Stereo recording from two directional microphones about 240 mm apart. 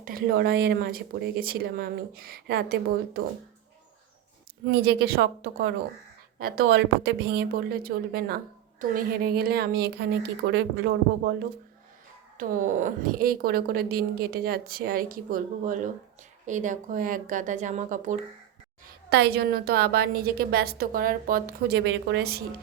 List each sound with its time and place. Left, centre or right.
0.0 s a woman's voice: right
4.7 s a woman's voice: right
12.4 s a woman's voice: right
19.1 s a woman's voice: right